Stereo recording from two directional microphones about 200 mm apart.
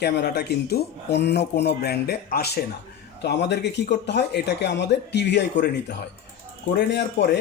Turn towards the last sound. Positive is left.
turn(degrees=55)  # may be behind; listen again after turning